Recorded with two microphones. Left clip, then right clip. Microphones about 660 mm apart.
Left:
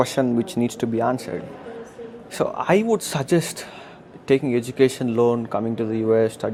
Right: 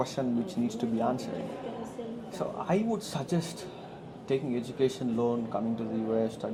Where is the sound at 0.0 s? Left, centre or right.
Left.